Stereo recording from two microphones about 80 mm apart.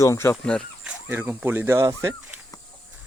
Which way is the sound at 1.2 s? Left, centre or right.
Right.